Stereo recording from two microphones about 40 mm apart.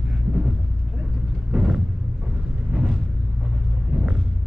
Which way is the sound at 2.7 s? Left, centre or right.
Centre.